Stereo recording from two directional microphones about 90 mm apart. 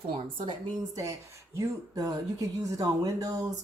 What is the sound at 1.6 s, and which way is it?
Speech, 40° right (ahead or behind).